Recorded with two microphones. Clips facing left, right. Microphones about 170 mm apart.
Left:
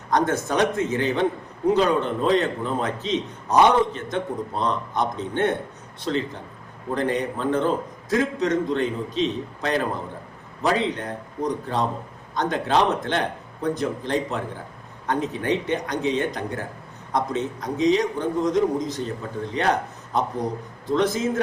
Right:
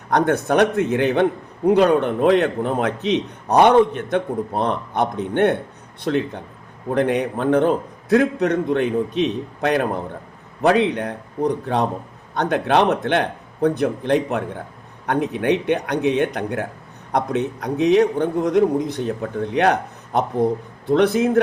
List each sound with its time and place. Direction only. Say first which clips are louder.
0.1 s a man's voice: right 4 dB; 65° right (ahead or behind)